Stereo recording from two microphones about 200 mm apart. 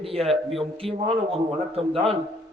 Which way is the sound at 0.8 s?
30° right (ahead or behind).